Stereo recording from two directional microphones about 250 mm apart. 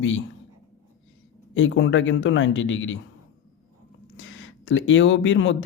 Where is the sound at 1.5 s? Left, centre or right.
Left.